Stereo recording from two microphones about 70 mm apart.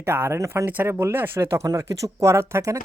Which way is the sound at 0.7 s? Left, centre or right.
Right.